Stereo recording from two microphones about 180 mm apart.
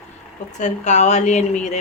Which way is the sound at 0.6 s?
40° left (ahead or behind).